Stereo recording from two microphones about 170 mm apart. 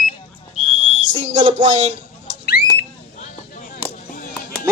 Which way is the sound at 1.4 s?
30° right (ahead or behind).